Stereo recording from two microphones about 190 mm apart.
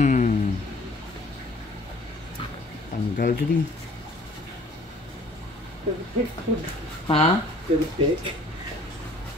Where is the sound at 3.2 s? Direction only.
50° left (ahead or behind).